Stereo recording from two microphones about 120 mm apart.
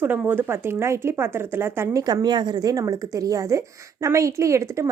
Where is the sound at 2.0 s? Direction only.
35° right (ahead or behind).